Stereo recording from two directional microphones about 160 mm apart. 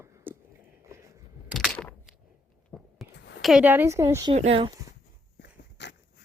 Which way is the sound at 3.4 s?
5° right (ahead or behind).